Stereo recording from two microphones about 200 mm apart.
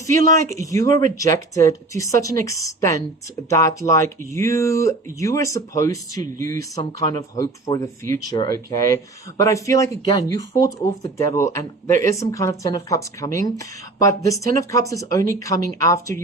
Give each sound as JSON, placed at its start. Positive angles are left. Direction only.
{"t": 0.1, "sound": "speech", "side_deg": 15}